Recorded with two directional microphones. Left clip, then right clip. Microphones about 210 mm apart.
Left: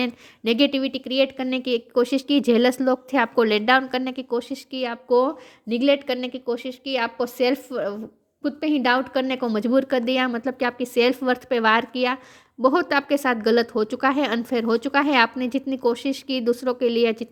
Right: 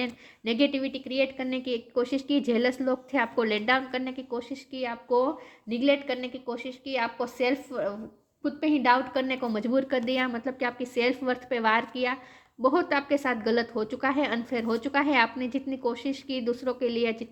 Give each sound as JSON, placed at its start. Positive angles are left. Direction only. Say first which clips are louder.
{"t": 0.0, "sound": "a woman's voice", "louder": "left 7 dB", "side_deg": 45}